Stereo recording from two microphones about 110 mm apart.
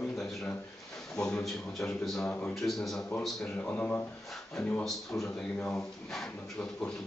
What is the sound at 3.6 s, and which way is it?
Speech, 15° left (ahead or behind).